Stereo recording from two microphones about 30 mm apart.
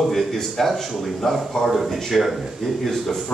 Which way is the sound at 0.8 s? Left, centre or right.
Centre.